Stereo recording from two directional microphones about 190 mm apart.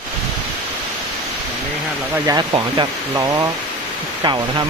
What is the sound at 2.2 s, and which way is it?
Speech, 25° right (ahead or behind).